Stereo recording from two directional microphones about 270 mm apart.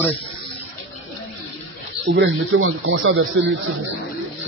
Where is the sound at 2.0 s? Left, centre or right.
Right.